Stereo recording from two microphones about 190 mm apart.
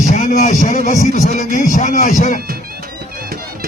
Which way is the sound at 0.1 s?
40° left (ahead or behind).